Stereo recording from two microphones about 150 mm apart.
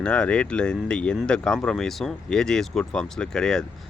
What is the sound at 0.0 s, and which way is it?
Speech, 5° left (ahead or behind).